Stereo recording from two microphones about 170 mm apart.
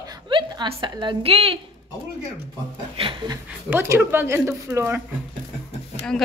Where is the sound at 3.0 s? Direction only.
30° right (ahead or behind).